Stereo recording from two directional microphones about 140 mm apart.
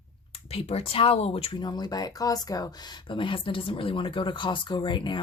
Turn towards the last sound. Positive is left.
turn(degrees=35)  # may be behind; listen again after turning